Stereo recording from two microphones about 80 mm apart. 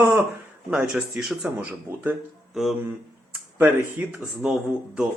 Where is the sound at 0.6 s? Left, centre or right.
Centre.